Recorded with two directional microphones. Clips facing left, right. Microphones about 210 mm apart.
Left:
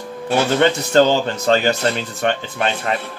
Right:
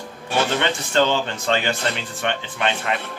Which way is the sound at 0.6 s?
40° left (ahead or behind).